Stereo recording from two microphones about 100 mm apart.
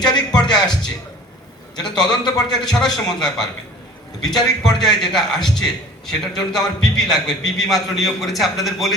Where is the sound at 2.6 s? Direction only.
5° left (ahead or behind).